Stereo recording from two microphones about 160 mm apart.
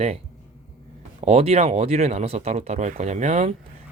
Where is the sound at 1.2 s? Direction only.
40° right (ahead or behind).